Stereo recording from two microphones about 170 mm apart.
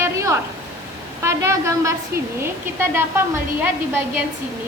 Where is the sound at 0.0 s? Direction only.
15° right (ahead or behind).